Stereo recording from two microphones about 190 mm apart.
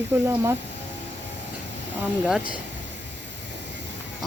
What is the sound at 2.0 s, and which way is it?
Speech, 5° right (ahead or behind).